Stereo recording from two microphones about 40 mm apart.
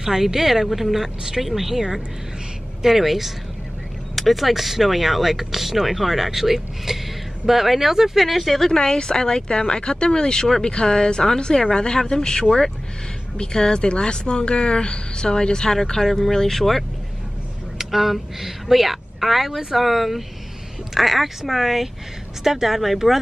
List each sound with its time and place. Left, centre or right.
0.0 s speech: centre
8.7 s a woman's voice: centre